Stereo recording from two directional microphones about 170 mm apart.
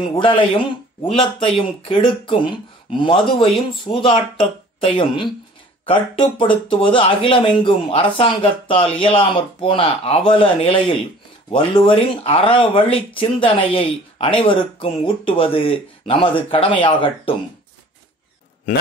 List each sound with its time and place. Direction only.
0.0 s speech: 30° left (ahead or behind)